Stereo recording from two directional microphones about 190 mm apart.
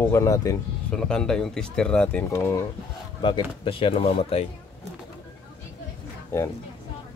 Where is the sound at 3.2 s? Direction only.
25° left (ahead or behind).